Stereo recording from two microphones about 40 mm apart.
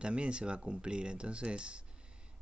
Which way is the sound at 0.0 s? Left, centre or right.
Right.